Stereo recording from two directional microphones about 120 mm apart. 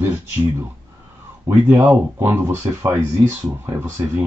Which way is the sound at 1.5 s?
15° right (ahead or behind).